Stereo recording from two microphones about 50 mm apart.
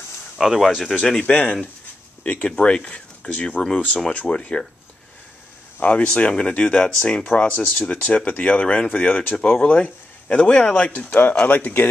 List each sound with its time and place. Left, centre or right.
0.4 s speech: centre
0.8 s speech: centre
2.2 s speech: left
2.5 s speech: centre
5.8 s speech: left
9.8 s a sound: left
10.4 s speech: left